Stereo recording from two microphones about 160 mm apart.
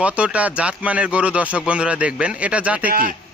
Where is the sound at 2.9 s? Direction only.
65° right (ahead or behind).